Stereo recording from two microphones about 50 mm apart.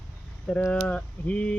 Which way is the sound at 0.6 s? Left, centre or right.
Left.